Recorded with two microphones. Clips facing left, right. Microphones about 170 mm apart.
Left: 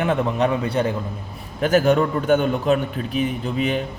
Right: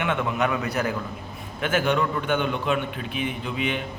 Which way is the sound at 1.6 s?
40° left (ahead or behind).